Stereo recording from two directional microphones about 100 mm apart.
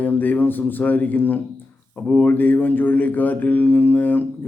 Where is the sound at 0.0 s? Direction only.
15° left (ahead or behind).